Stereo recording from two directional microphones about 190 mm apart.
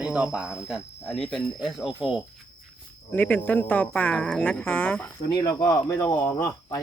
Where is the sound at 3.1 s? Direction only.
10° left (ahead or behind).